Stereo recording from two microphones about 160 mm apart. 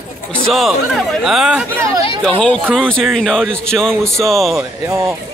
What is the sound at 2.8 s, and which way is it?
A man's voice, 5° left (ahead or behind).